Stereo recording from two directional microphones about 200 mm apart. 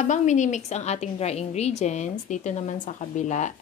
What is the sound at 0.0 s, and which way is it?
A woman's voice, 35° left (ahead or behind).